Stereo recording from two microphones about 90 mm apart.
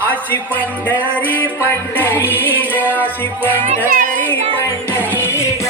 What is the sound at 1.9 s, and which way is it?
Music, 25° left (ahead or behind).